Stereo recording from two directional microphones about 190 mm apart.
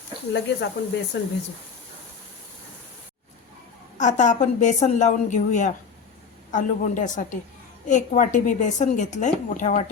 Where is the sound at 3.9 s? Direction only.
40° left (ahead or behind).